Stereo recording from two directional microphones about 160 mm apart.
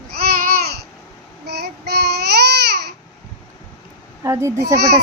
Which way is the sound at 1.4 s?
90° right.